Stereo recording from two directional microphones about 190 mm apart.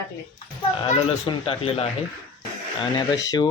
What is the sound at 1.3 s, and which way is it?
Speech, 30° left (ahead or behind).